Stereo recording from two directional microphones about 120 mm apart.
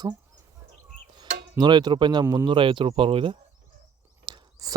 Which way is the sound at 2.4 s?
45° right (ahead or behind).